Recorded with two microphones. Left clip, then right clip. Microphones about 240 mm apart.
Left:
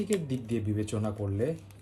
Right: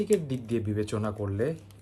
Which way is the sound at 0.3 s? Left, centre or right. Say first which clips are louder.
Right 2 dB; centre.